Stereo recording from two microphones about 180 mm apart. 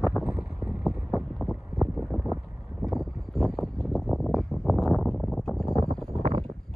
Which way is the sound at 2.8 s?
Centre (ahead or behind).